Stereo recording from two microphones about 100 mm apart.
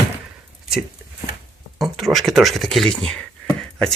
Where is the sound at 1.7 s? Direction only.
Centre (ahead or behind).